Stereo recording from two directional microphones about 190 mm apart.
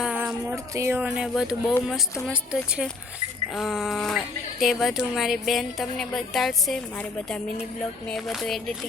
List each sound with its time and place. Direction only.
0.0 s speech: 5° right (ahead or behind)